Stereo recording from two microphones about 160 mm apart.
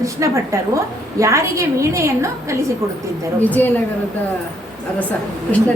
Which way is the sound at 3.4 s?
10° left (ahead or behind).